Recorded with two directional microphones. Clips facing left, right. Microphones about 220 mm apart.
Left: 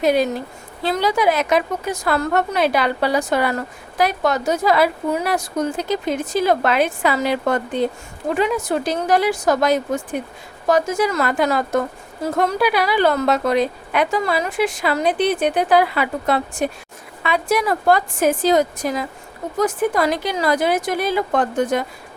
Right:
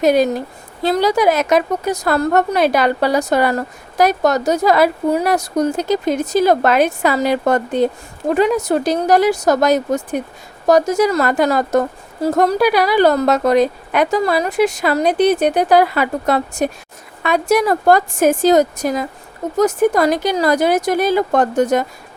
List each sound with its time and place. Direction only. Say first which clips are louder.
0.0 s a woman's voice: right 4 dB; 40° right (ahead or behind)